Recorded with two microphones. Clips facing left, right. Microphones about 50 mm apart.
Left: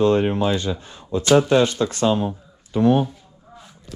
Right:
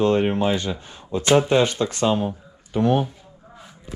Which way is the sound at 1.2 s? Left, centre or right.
Right.